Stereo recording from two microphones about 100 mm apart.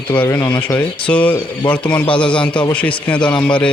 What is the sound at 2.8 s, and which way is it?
Speech, 15° left (ahead or behind).